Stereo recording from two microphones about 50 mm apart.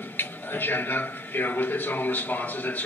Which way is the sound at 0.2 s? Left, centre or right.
Left.